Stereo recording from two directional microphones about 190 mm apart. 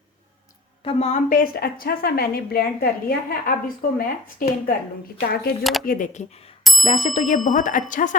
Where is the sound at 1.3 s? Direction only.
50° left (ahead or behind).